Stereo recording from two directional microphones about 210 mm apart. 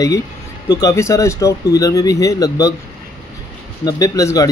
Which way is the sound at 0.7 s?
15° left (ahead or behind).